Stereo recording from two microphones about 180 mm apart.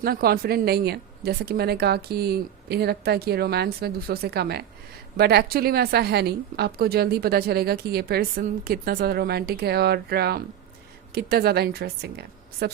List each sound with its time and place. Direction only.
0.0 s a woman's voice: 55° right (ahead or behind)